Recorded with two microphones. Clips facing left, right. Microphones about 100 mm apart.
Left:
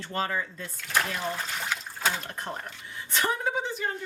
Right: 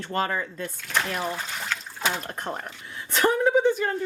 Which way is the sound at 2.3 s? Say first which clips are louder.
Right 3 dB; 45° right (ahead or behind).